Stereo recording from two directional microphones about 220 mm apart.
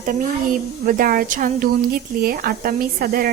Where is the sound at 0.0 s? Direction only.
35° right (ahead or behind).